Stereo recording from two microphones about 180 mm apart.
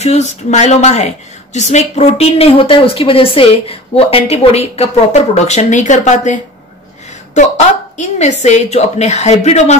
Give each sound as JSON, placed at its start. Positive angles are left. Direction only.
{"t": 0.0, "sound": "a woman's voice", "side_deg": 40}
{"t": 7.3, "sound": "a woman's voice", "side_deg": 40}